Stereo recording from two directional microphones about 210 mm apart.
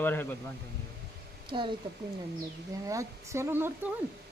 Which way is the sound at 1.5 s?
25° right (ahead or behind).